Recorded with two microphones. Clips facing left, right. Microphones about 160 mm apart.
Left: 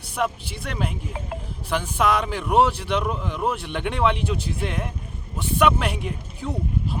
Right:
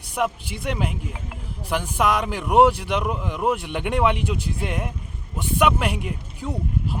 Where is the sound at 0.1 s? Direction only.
15° right (ahead or behind).